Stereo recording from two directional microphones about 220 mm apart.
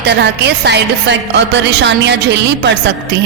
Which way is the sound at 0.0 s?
50° right (ahead or behind).